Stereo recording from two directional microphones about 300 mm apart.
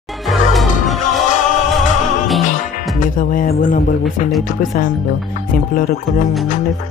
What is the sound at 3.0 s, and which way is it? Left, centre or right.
Music, left.